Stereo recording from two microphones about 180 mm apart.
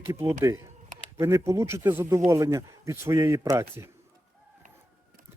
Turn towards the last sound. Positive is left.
turn(degrees=-15)  # may be behind; listen again after turning